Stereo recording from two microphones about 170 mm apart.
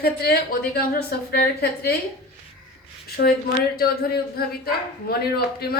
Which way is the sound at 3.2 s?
60° left (ahead or behind).